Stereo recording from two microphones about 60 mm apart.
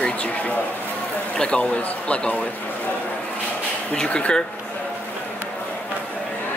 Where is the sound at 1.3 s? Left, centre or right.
Centre.